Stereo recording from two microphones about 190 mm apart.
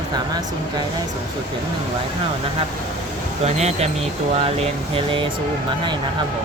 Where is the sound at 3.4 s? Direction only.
35° right (ahead or behind).